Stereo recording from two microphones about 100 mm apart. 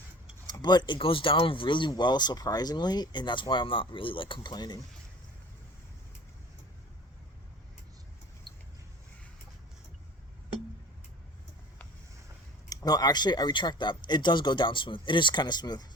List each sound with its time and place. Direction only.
0.6 s speech: 45° left (ahead or behind)
12.6 s speech: 40° left (ahead or behind)